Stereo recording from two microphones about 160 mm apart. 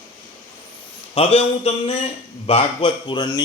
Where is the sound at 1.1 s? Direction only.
40° left (ahead or behind).